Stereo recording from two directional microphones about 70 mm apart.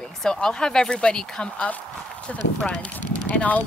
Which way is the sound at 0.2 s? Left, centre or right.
Centre.